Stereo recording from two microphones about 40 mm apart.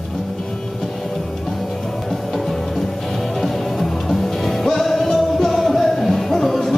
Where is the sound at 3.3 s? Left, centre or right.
Centre.